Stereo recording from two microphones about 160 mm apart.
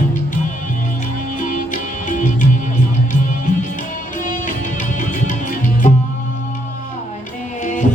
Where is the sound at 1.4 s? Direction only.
50° left (ahead or behind).